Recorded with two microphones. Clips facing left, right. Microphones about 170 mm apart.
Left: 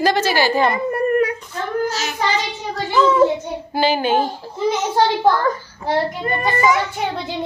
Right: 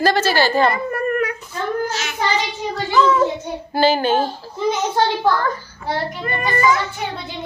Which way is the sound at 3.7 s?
15° left (ahead or behind).